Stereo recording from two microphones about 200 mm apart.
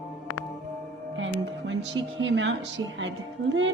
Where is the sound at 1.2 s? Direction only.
70° right (ahead or behind).